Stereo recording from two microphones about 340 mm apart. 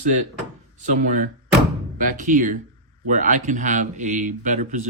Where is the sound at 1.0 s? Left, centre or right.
Right.